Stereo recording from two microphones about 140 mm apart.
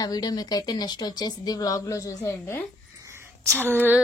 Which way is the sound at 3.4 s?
20° right (ahead or behind).